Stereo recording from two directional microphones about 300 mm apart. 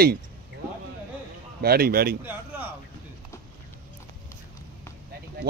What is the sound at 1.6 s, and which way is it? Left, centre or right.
Speech, right.